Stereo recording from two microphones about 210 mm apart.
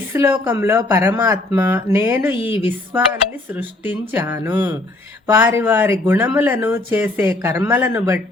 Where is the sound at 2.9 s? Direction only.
10° right (ahead or behind).